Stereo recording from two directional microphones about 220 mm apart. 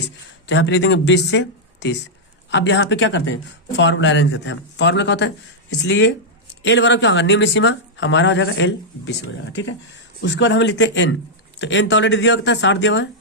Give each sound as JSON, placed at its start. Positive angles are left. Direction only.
{"t": 0.4, "sound": "speech", "side_deg": 55}